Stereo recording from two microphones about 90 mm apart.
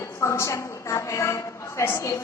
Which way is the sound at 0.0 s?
30° left (ahead or behind).